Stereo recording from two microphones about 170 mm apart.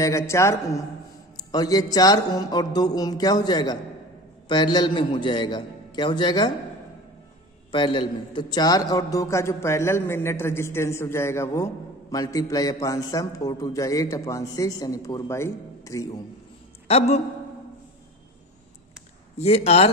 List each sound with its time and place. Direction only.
0.0 s a man's voice: 15° left (ahead or behind)
7.7 s a man's voice: 30° left (ahead or behind)
16.8 s a man's voice: 35° left (ahead or behind)
19.3 s speech: 40° left (ahead or behind)